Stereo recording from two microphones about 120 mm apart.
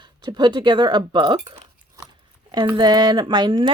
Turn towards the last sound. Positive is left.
turn(degrees=-35)  # may be behind; listen again after turning